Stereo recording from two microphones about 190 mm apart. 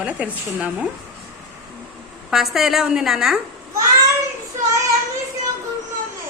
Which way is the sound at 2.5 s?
Centre (ahead or behind).